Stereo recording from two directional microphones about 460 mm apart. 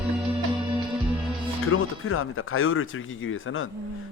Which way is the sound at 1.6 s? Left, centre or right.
Left.